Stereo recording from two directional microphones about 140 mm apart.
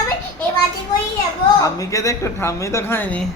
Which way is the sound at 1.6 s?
25° left (ahead or behind).